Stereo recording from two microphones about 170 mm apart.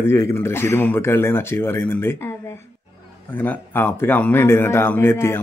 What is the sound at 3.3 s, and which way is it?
Speech, 10° left (ahead or behind).